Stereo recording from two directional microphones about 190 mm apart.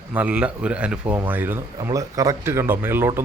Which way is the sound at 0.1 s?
5° right (ahead or behind).